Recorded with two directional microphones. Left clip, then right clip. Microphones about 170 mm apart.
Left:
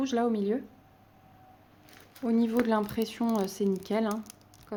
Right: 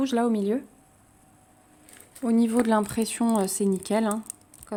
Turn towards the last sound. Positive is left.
turn(degrees=-25)  # may be behind; listen again after turning